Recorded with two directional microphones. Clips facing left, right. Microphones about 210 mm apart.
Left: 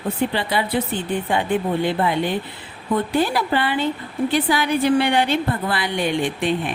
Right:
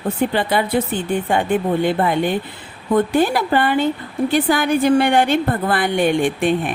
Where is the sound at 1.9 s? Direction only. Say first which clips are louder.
Right 3 dB; 50° right (ahead or behind).